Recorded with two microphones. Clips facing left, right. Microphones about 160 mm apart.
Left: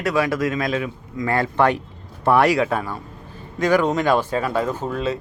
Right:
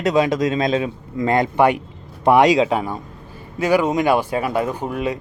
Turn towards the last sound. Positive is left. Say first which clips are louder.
# even
turn(degrees=-15)  # may be behind; listen again after turning